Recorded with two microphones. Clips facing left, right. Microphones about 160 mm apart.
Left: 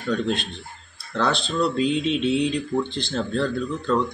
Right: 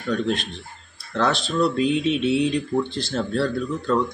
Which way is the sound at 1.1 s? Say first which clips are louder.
Right 1 dB; centre (ahead or behind).